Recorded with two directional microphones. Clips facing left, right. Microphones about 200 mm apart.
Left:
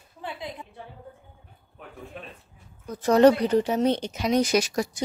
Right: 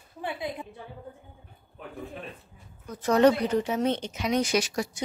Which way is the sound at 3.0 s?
35° left (ahead or behind).